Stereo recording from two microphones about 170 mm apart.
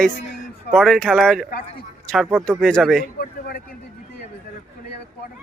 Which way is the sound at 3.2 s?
65° left (ahead or behind).